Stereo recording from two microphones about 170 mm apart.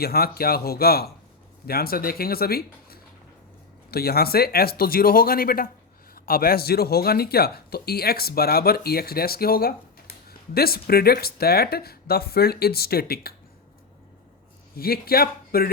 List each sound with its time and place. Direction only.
0.0 s speech: 65° left (ahead or behind)
14.8 s speech: 60° left (ahead or behind)